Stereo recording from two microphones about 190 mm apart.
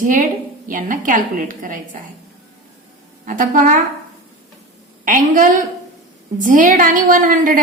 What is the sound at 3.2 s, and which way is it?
Speech, 45° right (ahead or behind).